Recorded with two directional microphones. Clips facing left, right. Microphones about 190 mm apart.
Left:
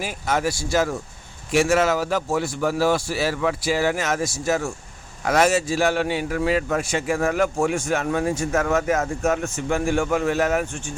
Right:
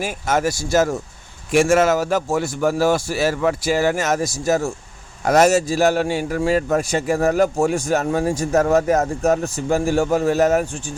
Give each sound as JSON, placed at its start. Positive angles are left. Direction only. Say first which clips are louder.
{"t": 0.0, "sound": "a man's voice", "louder": "right 3 dB", "side_deg": -45}